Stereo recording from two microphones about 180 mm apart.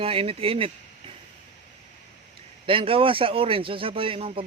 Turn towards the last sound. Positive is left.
turn(degrees=-30)  # may be behind; listen again after turning